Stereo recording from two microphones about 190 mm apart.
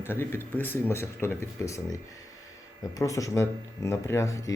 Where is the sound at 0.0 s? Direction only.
10° left (ahead or behind).